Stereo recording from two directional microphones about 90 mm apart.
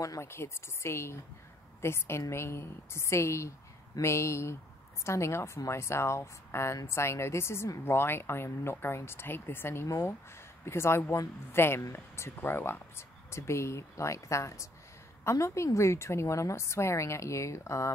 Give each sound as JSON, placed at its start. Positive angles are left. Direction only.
{"t": 0.0, "sound": "a woman's voice", "side_deg": 35}